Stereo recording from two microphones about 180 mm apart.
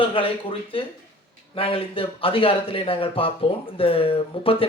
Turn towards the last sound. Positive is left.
turn(degrees=30)  # may be behind; listen again after turning